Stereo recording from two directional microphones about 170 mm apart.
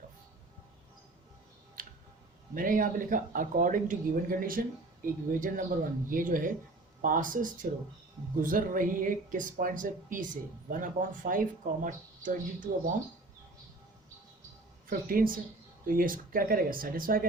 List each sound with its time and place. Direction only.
2.6 s speech: 55° right (ahead or behind)
14.8 s speech: 55° right (ahead or behind)